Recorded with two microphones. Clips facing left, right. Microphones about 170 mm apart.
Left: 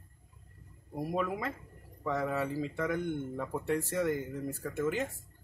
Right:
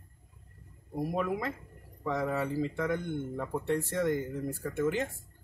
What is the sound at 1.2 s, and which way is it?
Speech, centre (ahead or behind).